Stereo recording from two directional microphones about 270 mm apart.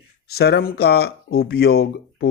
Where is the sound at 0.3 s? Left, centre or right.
Left.